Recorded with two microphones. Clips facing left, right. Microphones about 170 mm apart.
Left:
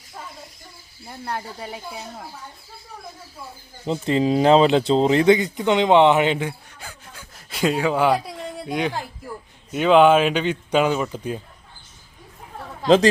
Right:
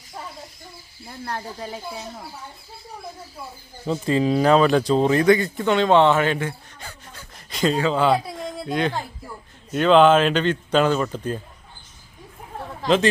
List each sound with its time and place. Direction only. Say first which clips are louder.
1.3 s speech: left 1 dB; 10° left (ahead or behind)
3.8 s speech: even; 25° left (ahead or behind)
6.5 s a sound: even; 10° left (ahead or behind)
8.1 s a woman's voice: right 1 dB; 10° left (ahead or behind)